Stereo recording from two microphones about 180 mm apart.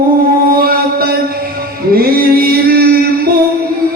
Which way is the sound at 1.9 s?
55° right (ahead or behind).